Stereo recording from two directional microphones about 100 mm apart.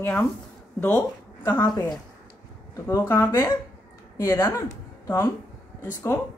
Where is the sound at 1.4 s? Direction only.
25° left (ahead or behind).